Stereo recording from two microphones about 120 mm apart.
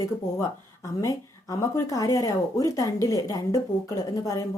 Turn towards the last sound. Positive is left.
turn(degrees=30)  # may be behind; listen again after turning